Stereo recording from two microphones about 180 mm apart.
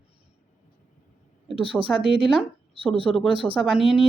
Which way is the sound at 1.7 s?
Centre (ahead or behind).